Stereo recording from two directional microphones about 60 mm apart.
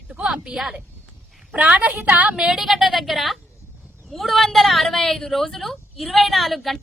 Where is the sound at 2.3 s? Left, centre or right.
Centre.